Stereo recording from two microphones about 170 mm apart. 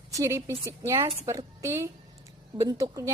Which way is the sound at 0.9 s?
30° right (ahead or behind).